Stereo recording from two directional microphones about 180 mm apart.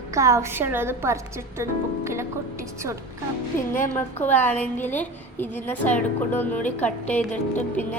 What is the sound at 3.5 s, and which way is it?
A woman's voice, 10° left (ahead or behind).